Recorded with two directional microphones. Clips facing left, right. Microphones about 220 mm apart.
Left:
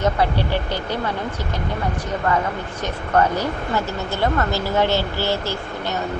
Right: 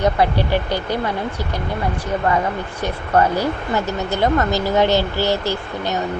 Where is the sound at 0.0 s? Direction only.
15° right (ahead or behind).